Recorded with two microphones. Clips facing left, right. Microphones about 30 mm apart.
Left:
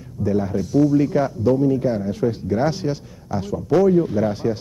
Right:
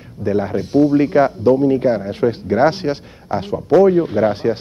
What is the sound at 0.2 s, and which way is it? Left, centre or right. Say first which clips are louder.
Speech: right 3 dB; right.